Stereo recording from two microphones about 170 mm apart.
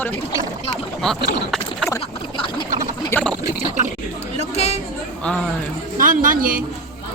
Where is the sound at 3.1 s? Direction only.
10° left (ahead or behind).